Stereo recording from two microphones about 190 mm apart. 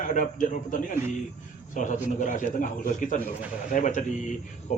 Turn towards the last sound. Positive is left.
turn(degrees=40)  # may be behind; listen again after turning